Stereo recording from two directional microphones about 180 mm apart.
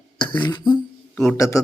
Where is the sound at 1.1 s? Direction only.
5° left (ahead or behind).